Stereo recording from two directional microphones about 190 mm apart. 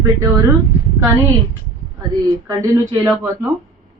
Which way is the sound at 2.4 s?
15° right (ahead or behind).